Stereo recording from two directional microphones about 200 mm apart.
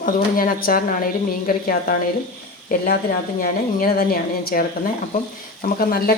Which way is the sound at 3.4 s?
45° left (ahead or behind).